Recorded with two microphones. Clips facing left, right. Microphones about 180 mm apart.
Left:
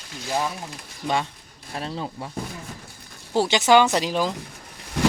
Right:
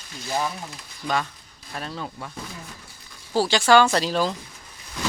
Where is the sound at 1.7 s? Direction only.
25° left (ahead or behind).